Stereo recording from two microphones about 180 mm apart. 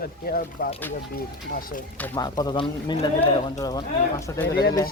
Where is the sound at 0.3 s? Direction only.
55° left (ahead or behind).